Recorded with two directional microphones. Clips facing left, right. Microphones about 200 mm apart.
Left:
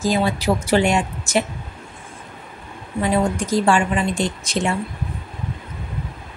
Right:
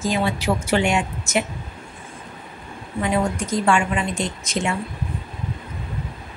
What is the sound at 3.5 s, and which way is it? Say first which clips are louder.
A woman's voice: left 2 dB; 35° left (ahead or behind).